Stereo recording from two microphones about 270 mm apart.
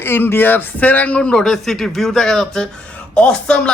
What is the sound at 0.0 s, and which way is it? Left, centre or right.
A man's voice, centre.